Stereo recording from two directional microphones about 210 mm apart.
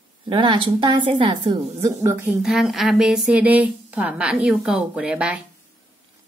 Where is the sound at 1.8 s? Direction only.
10° right (ahead or behind).